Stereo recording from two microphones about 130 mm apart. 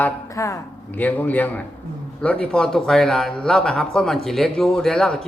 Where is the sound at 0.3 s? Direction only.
25° left (ahead or behind).